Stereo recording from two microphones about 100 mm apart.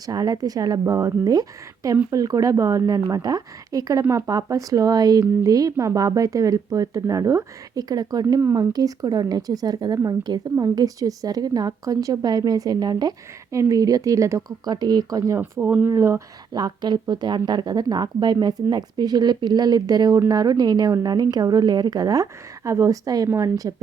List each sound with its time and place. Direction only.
0.0 s a woman's voice: 40° right (ahead or behind)
8.4 s speech: 25° right (ahead or behind)
8.7 s a woman's voice: 40° right (ahead or behind)
14.7 s speech: 45° right (ahead or behind)
15.4 s speech: 20° right (ahead or behind)
15.9 s a woman's voice: 30° right (ahead or behind)
16.5 s a woman's voice: 45° right (ahead or behind)